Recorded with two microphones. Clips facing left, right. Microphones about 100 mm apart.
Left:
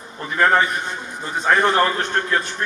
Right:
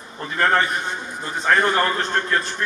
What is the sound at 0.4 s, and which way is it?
A man's voice, 15° left (ahead or behind).